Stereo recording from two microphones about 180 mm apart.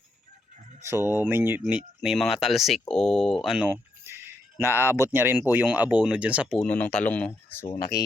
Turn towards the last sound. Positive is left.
turn(degrees=25)  # may be behind; listen again after turning